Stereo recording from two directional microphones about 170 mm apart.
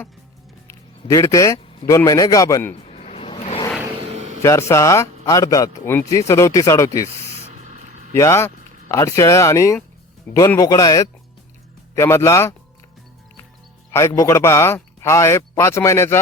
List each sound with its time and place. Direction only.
0.7 s a sound: 15° left (ahead or behind)
1.9 s speech: 20° left (ahead or behind)
2.7 s vehicle: 40° left (ahead or behind)
3.9 s a sound: 40° right (ahead or behind)
4.4 s speech: 15° left (ahead or behind)
7.5 s spray: 45° right (ahead or behind)
8.1 s speech: 15° left (ahead or behind)
13.9 s speech: 15° left (ahead or behind)